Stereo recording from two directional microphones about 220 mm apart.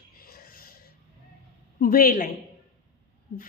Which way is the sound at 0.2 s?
45° left (ahead or behind).